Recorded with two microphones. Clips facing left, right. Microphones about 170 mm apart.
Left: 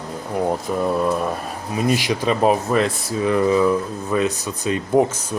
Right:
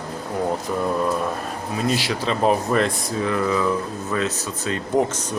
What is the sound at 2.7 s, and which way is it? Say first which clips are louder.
Speech: left 1 dB; 5° left (ahead or behind).